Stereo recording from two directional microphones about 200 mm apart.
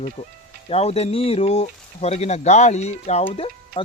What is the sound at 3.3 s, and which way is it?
Music, 30° left (ahead or behind).